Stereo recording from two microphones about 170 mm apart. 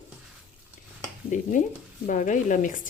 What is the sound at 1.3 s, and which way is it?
Speech, 50° left (ahead or behind).